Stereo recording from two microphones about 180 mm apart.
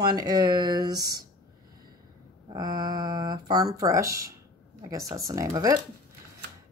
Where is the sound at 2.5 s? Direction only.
20° right (ahead or behind).